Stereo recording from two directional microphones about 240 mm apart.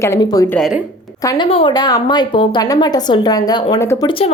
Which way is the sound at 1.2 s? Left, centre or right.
Left.